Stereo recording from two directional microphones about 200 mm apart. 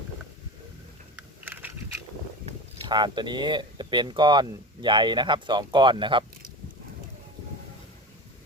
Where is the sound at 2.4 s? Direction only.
20° right (ahead or behind).